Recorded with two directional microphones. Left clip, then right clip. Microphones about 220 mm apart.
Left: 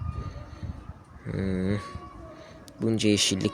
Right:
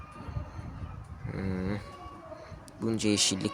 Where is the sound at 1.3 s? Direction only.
20° left (ahead or behind).